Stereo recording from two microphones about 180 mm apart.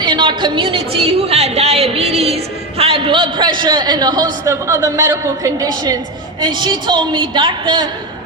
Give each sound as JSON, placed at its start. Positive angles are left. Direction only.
{"t": 0.0, "sound": "a woman's voice", "side_deg": -25}